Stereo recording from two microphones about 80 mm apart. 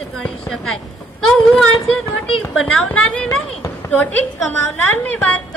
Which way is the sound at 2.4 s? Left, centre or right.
Centre.